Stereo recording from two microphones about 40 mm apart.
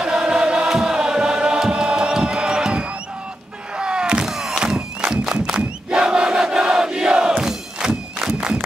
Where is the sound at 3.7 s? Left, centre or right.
Right.